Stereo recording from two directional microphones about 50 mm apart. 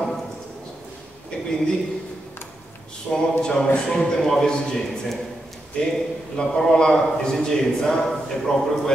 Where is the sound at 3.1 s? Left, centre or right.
Centre.